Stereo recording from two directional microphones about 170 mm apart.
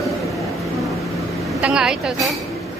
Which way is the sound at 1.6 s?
5° right (ahead or behind).